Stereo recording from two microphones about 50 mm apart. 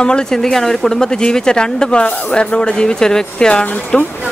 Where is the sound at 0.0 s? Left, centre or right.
Centre.